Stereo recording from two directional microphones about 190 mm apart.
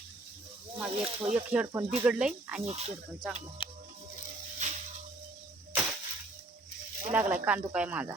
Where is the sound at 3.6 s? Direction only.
30° left (ahead or behind).